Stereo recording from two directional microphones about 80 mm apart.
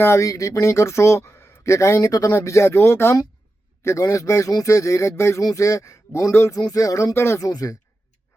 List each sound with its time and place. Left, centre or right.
0.0 s speech: left
6.6 s speech: left
7.3 s speech: left